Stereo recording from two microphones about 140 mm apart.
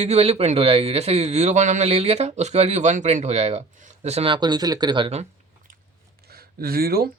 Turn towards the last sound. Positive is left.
turn(degrees=-90)